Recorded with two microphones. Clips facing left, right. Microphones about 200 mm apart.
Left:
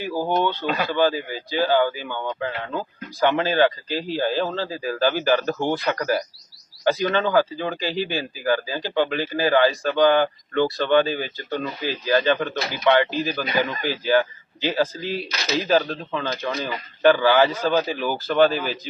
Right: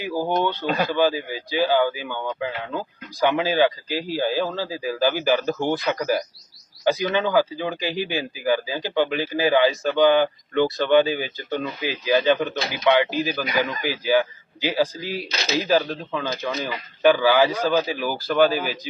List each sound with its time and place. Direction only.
0.3 s a man's voice: 15° right (ahead or behind)
0.6 s speech: 45° right (ahead or behind)
0.9 s a man's voice: 15° right (ahead or behind)